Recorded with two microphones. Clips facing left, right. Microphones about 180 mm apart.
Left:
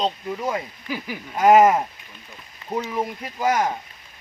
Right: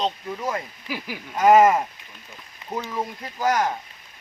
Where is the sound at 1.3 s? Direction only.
10° left (ahead or behind).